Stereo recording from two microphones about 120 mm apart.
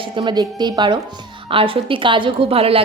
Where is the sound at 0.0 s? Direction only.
40° right (ahead or behind).